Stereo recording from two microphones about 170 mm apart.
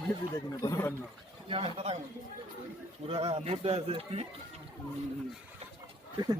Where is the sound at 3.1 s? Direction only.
35° right (ahead or behind).